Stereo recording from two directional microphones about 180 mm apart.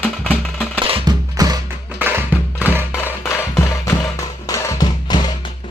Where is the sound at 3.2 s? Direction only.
15° left (ahead or behind).